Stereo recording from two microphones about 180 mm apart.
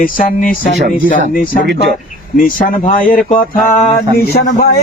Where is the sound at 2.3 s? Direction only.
50° left (ahead or behind).